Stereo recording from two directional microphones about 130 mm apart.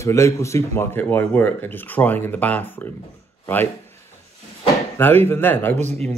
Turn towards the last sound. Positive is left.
turn(degrees=-60)  # may be behind; listen again after turning